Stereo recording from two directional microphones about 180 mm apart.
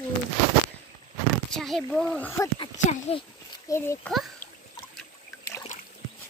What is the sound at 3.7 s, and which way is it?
Speech, 20° left (ahead or behind).